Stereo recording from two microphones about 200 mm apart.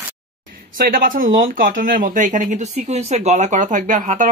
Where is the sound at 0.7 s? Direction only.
45° right (ahead or behind).